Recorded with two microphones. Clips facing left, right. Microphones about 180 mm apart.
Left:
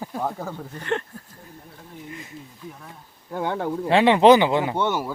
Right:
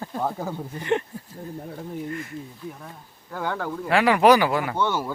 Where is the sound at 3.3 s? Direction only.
25° left (ahead or behind).